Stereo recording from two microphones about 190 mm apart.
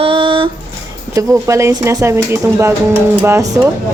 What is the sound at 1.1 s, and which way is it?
Speech, 15° right (ahead or behind).